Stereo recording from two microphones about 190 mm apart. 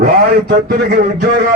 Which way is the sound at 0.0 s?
60° right (ahead or behind).